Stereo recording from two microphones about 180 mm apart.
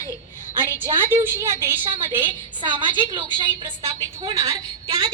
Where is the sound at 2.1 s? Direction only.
25° right (ahead or behind).